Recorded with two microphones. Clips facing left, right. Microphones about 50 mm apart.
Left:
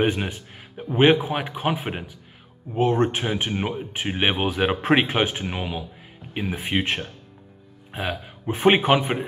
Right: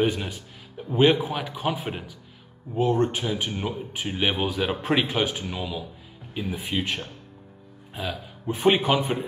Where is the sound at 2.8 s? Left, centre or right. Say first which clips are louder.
Left 2 dB; left.